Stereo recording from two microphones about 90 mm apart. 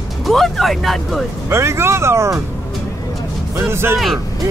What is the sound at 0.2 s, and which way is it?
Speech, centre (ahead or behind).